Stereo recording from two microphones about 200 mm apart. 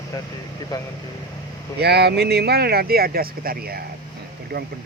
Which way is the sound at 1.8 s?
55° right (ahead or behind).